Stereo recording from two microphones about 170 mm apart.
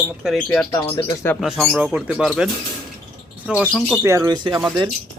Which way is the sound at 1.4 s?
Centre (ahead or behind).